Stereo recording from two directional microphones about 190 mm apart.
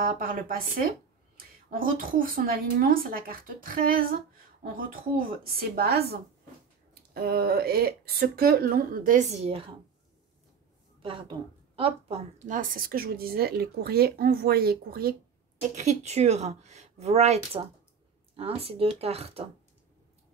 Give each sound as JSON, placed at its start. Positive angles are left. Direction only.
{"t": 0.0, "sound": "speech", "side_deg": -50}
{"t": 11.0, "sound": "speech", "side_deg": -25}
{"t": 15.7, "sound": "speech", "side_deg": -35}